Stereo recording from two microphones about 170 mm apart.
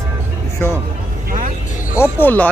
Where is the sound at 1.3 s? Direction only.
50° right (ahead or behind).